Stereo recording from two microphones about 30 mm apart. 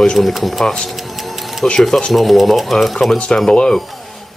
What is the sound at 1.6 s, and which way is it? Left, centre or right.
Speech, left.